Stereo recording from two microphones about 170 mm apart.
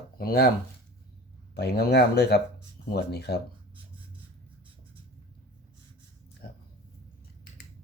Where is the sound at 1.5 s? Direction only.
70° left (ahead or behind).